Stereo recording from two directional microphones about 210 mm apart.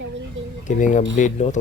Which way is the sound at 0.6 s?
35° left (ahead or behind).